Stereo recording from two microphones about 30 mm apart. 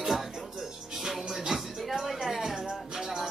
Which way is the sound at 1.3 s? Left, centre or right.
Centre.